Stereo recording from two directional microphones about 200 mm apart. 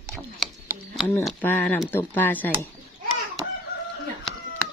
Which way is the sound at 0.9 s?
5° left (ahead or behind).